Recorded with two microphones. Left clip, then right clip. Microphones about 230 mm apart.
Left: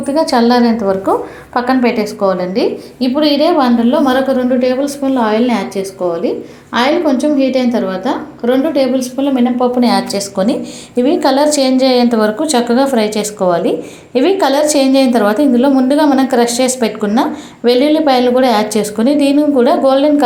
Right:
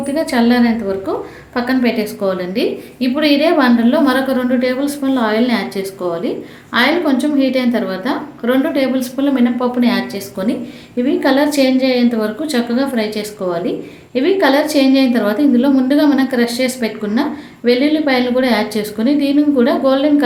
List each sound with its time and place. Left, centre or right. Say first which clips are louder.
0.3 s a woman's voice: left 3 dB; centre